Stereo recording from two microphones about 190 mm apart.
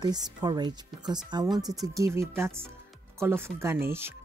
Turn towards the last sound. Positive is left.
turn(degrees=-10)  # may be behind; listen again after turning